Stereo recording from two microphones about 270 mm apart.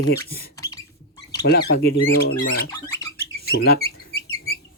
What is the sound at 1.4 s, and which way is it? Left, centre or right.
Speech, left.